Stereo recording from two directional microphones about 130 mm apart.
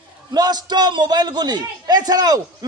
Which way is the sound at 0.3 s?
30° right (ahead or behind).